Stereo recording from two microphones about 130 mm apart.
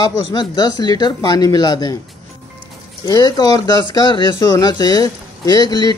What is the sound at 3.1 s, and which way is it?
Speech, 30° left (ahead or behind).